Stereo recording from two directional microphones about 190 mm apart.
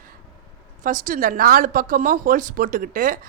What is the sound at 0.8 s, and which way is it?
A woman's voice, 45° right (ahead or behind).